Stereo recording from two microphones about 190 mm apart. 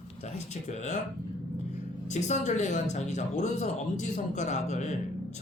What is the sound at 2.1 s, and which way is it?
Speech, 40° left (ahead or behind).